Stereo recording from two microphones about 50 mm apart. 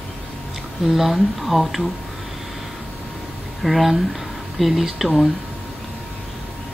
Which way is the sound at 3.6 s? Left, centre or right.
Centre.